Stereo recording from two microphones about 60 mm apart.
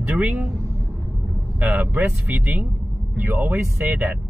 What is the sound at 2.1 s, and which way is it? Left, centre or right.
Speech, right.